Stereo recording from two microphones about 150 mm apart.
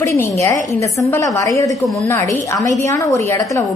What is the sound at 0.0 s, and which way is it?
A woman's voice, 20° left (ahead or behind).